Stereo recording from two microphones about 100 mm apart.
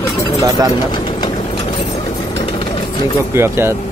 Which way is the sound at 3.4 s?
25° right (ahead or behind).